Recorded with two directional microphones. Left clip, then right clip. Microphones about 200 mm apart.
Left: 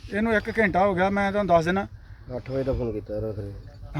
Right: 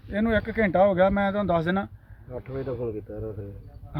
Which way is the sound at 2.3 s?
50° left (ahead or behind).